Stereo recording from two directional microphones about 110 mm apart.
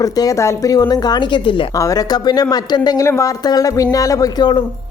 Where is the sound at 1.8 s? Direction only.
30° left (ahead or behind).